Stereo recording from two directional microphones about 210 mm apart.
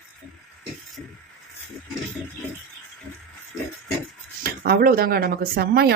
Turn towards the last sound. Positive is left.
turn(degrees=-50)  # may be behind; listen again after turning